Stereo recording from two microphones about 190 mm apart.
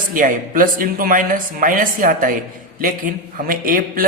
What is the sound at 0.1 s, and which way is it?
A man's voice, 45° right (ahead or behind).